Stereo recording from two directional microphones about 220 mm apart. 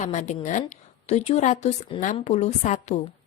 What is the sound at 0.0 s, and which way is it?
A woman's voice, 30° left (ahead or behind).